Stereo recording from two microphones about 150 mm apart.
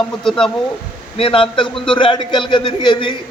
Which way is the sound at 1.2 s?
35° left (ahead or behind).